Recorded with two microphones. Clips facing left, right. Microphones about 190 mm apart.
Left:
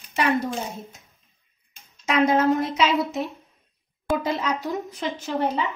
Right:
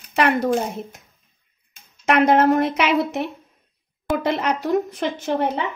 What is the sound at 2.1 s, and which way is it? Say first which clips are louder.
Speech: right 4 dB; 65° right (ahead or behind).